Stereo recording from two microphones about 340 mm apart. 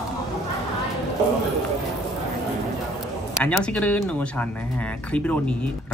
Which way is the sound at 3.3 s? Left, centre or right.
Centre.